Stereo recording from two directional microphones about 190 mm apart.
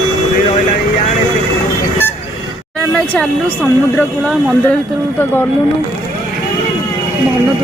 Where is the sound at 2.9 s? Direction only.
5° left (ahead or behind).